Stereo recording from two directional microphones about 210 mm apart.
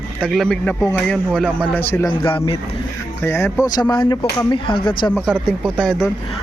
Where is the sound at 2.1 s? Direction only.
25° left (ahead or behind).